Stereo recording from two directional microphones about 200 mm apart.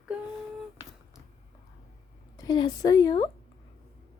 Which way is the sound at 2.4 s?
20° left (ahead or behind).